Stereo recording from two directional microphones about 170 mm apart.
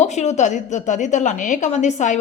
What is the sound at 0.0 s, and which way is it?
A woman's voice, 40° left (ahead or behind).